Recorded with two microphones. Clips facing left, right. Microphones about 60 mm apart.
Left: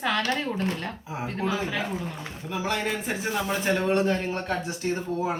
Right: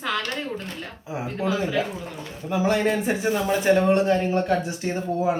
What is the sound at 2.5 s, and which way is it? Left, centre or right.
A man's voice, right.